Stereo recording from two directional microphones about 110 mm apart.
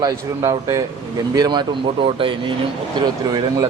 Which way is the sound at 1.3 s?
40° right (ahead or behind).